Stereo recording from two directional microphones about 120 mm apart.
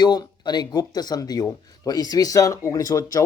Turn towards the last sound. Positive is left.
turn(degrees=30)  # may be behind; listen again after turning